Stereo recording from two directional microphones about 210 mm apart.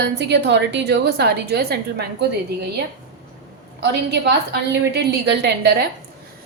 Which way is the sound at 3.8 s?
55° right (ahead or behind).